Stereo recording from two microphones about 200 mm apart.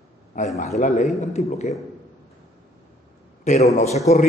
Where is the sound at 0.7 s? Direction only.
35° left (ahead or behind).